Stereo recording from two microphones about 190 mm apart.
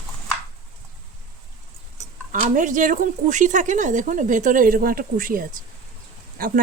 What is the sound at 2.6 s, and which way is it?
A woman's voice, 40° right (ahead or behind).